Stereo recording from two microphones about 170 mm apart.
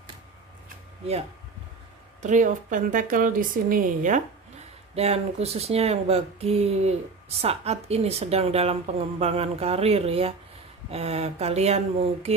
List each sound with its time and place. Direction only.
2.2 s a woman's voice: 50° right (ahead or behind)
4.9 s speech: 35° right (ahead or behind)